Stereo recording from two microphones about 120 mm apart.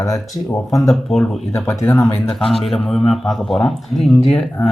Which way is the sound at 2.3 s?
Centre (ahead or behind).